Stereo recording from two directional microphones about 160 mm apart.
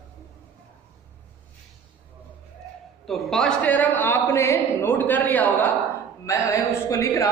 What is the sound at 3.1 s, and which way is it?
A man's voice, centre (ahead or behind).